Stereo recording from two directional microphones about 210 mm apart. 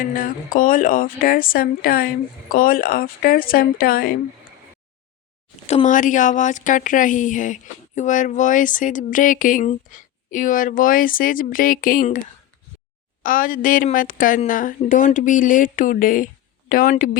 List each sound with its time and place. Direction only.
0.0 s speech: 40° left (ahead or behind)
5.6 s speech: 35° left (ahead or behind)
13.2 s speech: 40° left (ahead or behind)